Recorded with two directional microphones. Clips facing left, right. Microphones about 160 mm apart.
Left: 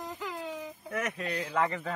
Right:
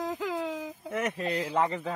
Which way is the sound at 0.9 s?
25° right (ahead or behind).